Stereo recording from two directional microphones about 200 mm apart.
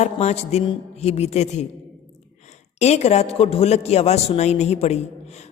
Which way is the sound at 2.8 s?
35° left (ahead or behind).